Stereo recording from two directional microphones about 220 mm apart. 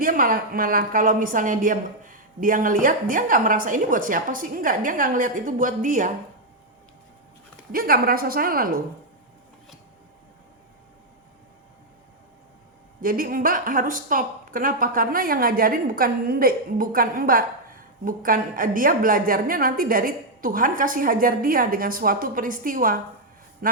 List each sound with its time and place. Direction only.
0.0 s a woman's voice: 40° right (ahead or behind)
7.7 s a woman's voice: 40° right (ahead or behind)
13.0 s a woman's voice: 40° right (ahead or behind)